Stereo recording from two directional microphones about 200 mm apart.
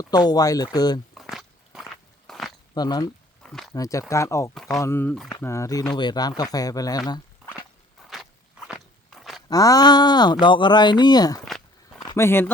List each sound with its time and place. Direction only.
0.0 s speech: 20° left (ahead or behind)
1.1 s a sound: centre (ahead or behind)
2.7 s speech: 20° left (ahead or behind)
3.4 s a sound: centre (ahead or behind)
3.8 s speech: 15° left (ahead or behind)
8.1 s walk: centre (ahead or behind)
9.5 s speech: 20° left (ahead or behind)
11.4 s walk: centre (ahead or behind)
12.1 s speech: 10° left (ahead or behind)